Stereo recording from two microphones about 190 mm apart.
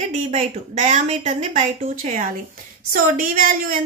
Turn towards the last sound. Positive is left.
turn(degrees=-45)  # may be behind; listen again after turning